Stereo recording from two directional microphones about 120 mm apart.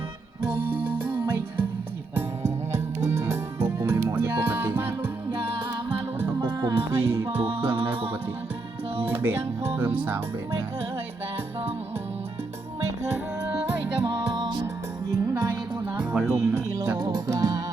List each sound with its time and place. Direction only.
0.4 s music: 20° right (ahead or behind)
6.4 s music: 35° right (ahead or behind)
6.9 s music: 20° right (ahead or behind)
7.4 s music: 50° right (ahead or behind)
9.2 s speech: 20° right (ahead or behind)
14.0 s music: 35° right (ahead or behind)
15.1 s music: 20° right (ahead or behind)